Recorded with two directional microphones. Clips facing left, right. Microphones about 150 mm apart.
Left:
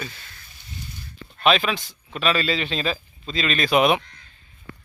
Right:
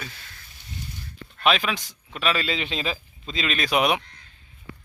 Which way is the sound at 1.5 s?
10° right (ahead or behind).